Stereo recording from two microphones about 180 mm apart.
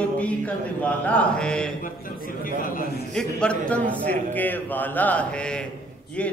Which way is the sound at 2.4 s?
50° left (ahead or behind).